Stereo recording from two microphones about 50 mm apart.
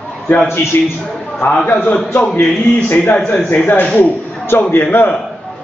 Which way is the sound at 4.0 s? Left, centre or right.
Left.